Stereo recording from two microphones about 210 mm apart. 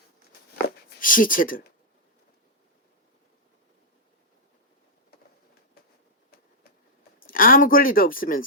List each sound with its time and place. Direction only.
0.9 s speech: 40° left (ahead or behind)
7.2 s speech: 40° left (ahead or behind)